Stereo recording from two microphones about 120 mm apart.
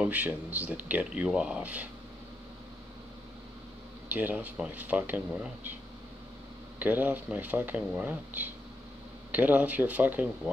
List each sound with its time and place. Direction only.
0.0 s speech: 10° right (ahead or behind)
4.1 s speech: 15° right (ahead or behind)
6.8 s speech: 15° right (ahead or behind)